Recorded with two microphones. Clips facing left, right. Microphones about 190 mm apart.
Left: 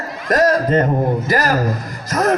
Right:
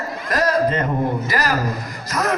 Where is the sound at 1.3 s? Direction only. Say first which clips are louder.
Left 4 dB; 45° left (ahead or behind).